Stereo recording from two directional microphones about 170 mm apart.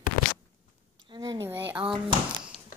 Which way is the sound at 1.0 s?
20° right (ahead or behind).